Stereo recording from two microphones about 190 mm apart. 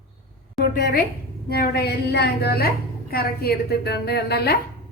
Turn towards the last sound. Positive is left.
turn(degrees=60)  # may be behind; listen again after turning